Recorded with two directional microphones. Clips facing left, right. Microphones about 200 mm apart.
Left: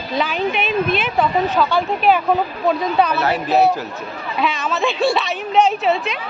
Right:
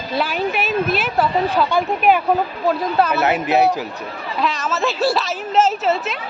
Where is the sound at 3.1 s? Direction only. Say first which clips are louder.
Right 1 dB; 20° right (ahead or behind).